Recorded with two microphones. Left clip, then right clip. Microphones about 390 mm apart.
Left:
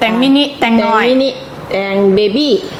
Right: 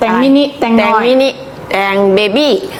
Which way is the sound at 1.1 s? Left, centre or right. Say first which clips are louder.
Right 3 dB; right.